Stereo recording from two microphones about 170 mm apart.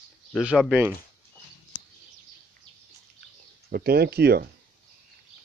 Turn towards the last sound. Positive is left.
turn(degrees=-70)  # may be behind; listen again after turning